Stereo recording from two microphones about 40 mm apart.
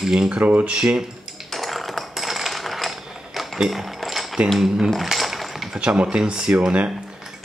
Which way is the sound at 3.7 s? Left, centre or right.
Centre.